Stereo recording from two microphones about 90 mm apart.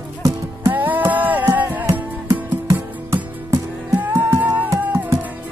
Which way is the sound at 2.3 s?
35° right (ahead or behind).